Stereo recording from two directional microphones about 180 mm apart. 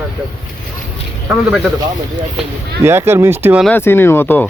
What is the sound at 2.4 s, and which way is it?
Speech, 5° right (ahead or behind).